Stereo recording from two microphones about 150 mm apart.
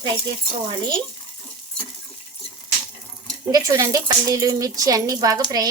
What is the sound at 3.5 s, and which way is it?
A woman's voice, 25° right (ahead or behind).